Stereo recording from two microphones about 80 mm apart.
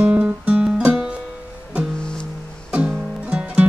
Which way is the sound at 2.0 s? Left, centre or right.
Centre.